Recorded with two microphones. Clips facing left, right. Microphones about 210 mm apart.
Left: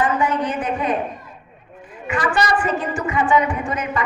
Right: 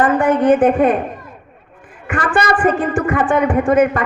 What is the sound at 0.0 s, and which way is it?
A man's voice, 50° right (ahead or behind).